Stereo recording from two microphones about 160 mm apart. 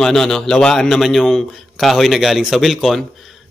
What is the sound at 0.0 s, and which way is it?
A man's voice, 5° left (ahead or behind).